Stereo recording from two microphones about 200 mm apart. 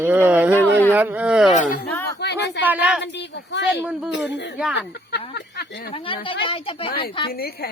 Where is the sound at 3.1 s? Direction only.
60° left (ahead or behind).